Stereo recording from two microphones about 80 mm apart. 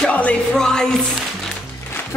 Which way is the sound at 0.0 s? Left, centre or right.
Centre.